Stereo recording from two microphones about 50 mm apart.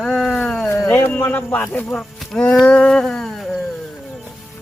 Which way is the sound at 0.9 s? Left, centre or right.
Left.